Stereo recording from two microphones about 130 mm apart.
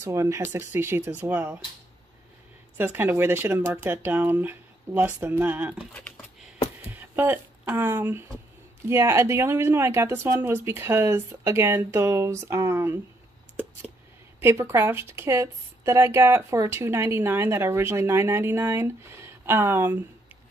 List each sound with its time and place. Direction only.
0.0 s a woman's voice: 25° right (ahead or behind)
2.8 s speech: 15° right (ahead or behind)
6.9 s a woman's voice: 15° right (ahead or behind)
14.4 s a woman's voice: 20° right (ahead or behind)